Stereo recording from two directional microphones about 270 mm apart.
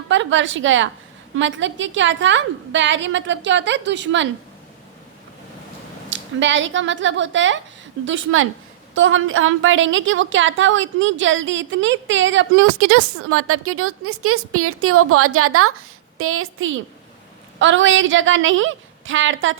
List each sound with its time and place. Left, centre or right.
0.1 s a woman's voice: right
6.1 s a woman's voice: right